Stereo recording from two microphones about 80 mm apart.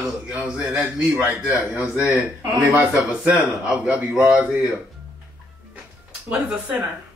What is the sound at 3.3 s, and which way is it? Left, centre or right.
Speech, centre.